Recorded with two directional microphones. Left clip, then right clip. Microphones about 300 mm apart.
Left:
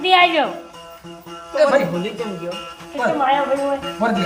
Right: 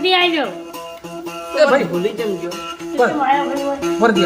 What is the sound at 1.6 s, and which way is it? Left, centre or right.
Speech, centre.